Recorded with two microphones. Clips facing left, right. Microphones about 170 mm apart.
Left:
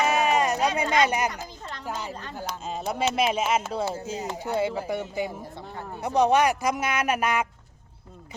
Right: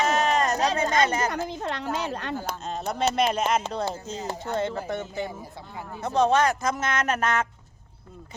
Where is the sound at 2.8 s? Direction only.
5° left (ahead or behind).